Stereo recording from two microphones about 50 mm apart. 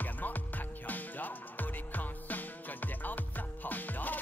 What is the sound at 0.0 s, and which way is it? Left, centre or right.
Music, left.